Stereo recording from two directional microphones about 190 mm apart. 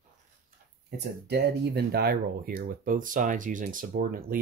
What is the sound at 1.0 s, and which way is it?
Speech, 60° right (ahead or behind).